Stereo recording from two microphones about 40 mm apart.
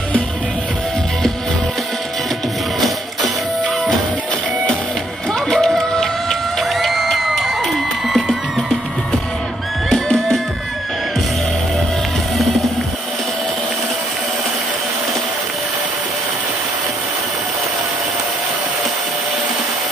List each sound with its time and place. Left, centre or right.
5.3 s music: centre
9.8 s music: centre